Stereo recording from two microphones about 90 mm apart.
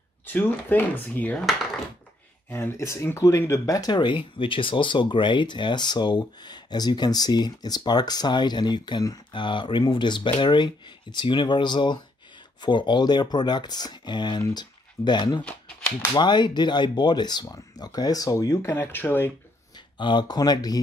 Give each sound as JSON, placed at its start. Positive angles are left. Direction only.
{"t": 0.3, "sound": "speech", "side_deg": 20}
{"t": 1.4, "sound": "speech", "side_deg": -5}
{"t": 2.5, "sound": "speech", "side_deg": 30}
{"t": 3.9, "sound": "speech", "side_deg": 65}
{"t": 20.0, "sound": "speech", "side_deg": 60}